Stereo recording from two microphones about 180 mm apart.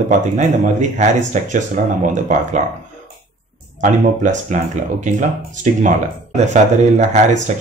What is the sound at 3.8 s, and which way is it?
Speech, 45° right (ahead or behind).